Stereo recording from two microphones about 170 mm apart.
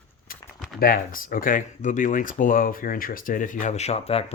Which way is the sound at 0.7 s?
55° left (ahead or behind).